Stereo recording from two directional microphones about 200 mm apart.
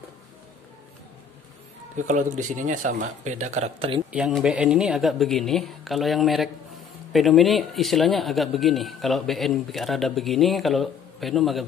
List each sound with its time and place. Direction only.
2.0 s speech: 40° right (ahead or behind)
4.1 s a man's voice: 5° right (ahead or behind)